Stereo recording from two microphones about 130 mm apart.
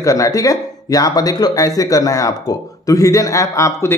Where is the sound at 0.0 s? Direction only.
25° left (ahead or behind).